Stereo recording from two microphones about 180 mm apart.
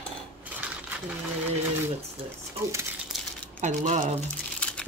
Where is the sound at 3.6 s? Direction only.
45° right (ahead or behind).